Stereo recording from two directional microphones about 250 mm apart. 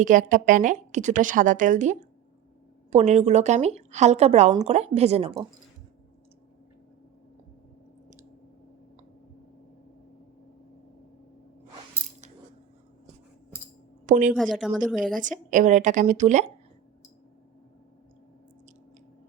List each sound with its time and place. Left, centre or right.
0.0 s a woman's voice: right
14.3 s speech: centre
15.1 s a woman's voice: right